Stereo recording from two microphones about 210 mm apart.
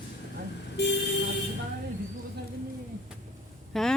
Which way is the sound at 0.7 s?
55° left (ahead or behind).